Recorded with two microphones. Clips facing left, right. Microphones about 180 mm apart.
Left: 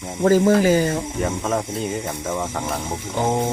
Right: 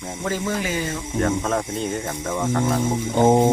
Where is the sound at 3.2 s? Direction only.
20° right (ahead or behind).